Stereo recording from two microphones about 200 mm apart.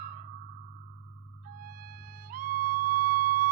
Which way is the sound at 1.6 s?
45° right (ahead or behind).